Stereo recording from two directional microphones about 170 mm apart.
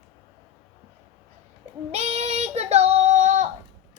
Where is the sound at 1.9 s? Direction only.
40° right (ahead or behind).